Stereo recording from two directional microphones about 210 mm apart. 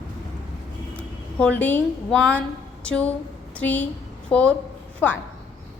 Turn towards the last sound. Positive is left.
turn(degrees=10)  # may be behind; listen again after turning